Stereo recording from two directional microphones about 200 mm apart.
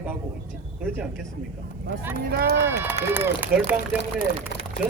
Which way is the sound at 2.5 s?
10° right (ahead or behind).